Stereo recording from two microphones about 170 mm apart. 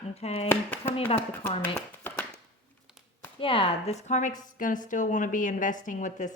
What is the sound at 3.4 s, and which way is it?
A woman's voice, 30° left (ahead or behind).